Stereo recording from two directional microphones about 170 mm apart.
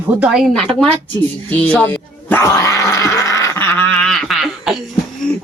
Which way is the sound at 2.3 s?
20° left (ahead or behind).